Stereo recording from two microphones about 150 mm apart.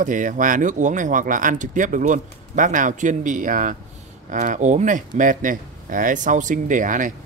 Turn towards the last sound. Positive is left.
turn(degrees=-60)  # may be behind; listen again after turning